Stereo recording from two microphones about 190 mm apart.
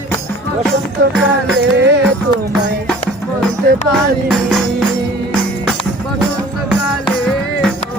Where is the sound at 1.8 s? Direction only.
65° right (ahead or behind).